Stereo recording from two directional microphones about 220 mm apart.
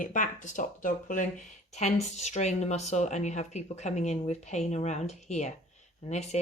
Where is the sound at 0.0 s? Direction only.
35° left (ahead or behind).